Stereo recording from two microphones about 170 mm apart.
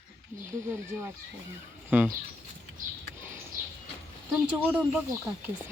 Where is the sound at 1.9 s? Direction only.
10° right (ahead or behind).